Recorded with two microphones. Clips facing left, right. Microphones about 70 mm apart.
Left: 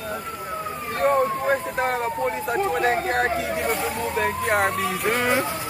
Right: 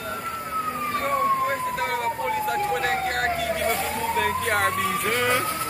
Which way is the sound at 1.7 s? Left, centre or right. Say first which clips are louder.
Left 2 dB; left.